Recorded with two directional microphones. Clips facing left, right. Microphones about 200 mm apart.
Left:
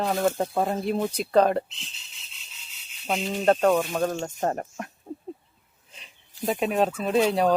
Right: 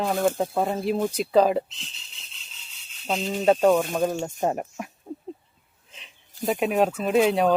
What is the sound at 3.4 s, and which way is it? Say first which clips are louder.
Speech: right 2 dB; 5° right (ahead or behind).